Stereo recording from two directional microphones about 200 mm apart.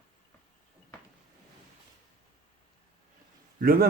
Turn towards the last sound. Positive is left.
turn(degrees=-50)  # may be behind; listen again after turning